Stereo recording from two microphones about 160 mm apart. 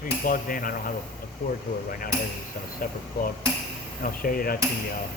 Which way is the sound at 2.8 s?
60° left (ahead or behind).